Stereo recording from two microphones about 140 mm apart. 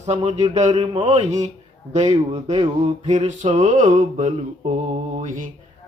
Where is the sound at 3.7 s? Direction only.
65° right (ahead or behind).